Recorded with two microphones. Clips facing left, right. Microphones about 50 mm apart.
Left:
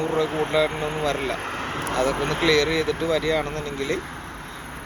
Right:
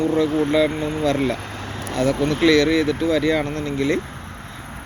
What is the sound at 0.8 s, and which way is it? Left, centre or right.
Speech, left.